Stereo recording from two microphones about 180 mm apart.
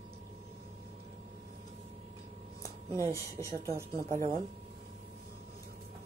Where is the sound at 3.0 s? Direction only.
15° left (ahead or behind).